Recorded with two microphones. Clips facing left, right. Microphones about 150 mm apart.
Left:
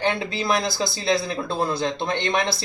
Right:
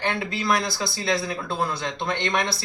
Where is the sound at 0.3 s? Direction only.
30° left (ahead or behind).